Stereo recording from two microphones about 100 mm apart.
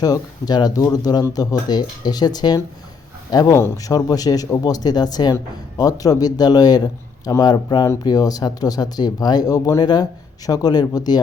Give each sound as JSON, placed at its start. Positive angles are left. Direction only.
{"t": 0.0, "sound": "speech", "side_deg": 40}